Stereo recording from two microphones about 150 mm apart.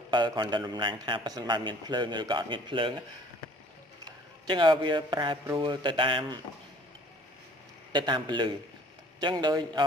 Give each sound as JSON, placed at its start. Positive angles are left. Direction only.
{"t": 0.1, "sound": "a man's voice", "side_deg": -30}
{"t": 4.0, "sound": "a man's voice", "side_deg": -30}
{"t": 7.9, "sound": "a man's voice", "side_deg": -30}